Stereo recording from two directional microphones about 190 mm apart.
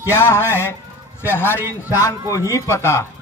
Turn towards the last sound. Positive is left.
turn(degrees=15)  # may be behind; listen again after turning